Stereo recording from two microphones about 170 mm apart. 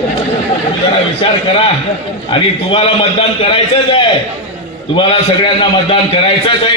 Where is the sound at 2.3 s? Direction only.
35° left (ahead or behind).